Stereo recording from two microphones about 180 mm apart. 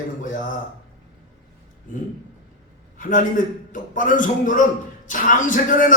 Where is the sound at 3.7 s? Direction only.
45° left (ahead or behind).